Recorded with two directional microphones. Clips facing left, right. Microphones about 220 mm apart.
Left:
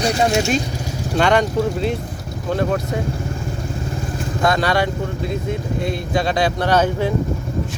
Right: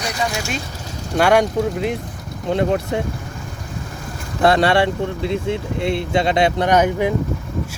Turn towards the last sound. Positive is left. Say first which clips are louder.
# right 1 dB
turn(degrees=-15)  # may be behind; listen again after turning